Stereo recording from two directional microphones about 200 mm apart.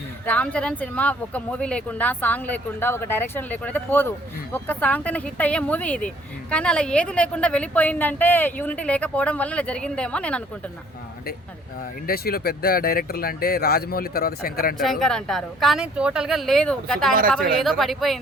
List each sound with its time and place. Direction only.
0.3 s a woman's voice: 5° left (ahead or behind)
12.0 s speech: 50° left (ahead or behind)
14.8 s a woman's voice: centre (ahead or behind)